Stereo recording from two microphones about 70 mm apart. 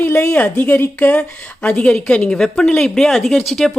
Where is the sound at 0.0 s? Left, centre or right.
Left.